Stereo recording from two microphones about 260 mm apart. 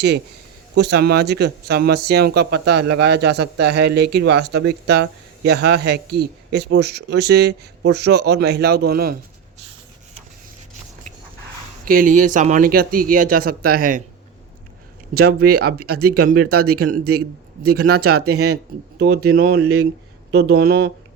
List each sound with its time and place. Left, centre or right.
0.8 s speech: right
11.9 s speech: right
15.1 s speech: right
16.1 s speech: right
18.9 s speech: right
19.5 s speech: right
20.3 s speech: right